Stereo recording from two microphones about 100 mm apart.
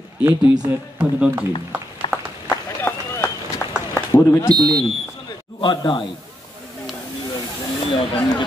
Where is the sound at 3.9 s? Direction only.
30° left (ahead or behind).